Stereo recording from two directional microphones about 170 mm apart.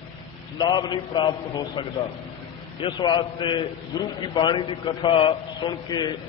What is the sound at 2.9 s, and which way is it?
A man's voice, 20° left (ahead or behind).